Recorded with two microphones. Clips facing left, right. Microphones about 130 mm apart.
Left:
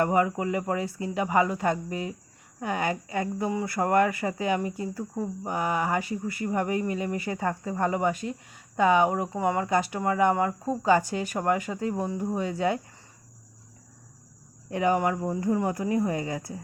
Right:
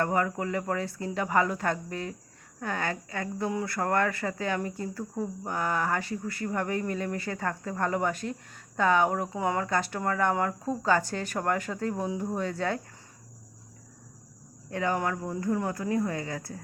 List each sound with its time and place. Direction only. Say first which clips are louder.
0.0 s speech: left 4 dB; 10° left (ahead or behind)
3.5 s a sound: left 2 dB; 5° left (ahead or behind)
3.8 s speech: left 5 dB; 15° left (ahead or behind)
14.7 s speech: left 4 dB; 15° left (ahead or behind)